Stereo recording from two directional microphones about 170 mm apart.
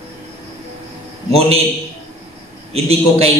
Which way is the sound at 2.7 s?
35° right (ahead or behind).